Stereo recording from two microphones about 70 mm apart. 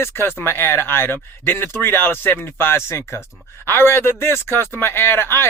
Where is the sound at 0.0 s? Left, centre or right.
Left.